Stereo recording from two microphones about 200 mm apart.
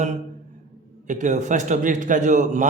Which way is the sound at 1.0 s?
40° right (ahead or behind).